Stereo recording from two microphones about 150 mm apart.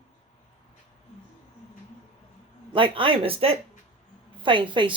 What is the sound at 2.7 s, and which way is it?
Speech, 35° right (ahead or behind).